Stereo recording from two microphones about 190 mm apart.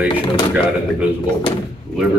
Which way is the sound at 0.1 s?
25° left (ahead or behind).